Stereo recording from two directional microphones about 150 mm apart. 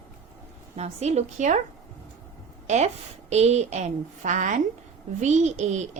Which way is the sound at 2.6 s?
50° right (ahead or behind).